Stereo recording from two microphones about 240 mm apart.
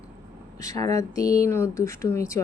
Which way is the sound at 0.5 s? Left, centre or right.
Centre.